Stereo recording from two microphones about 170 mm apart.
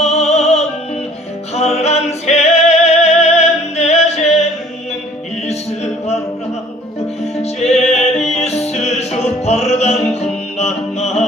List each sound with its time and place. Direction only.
0.0 s music: 40° left (ahead or behind)
7.6 s music: 40° left (ahead or behind)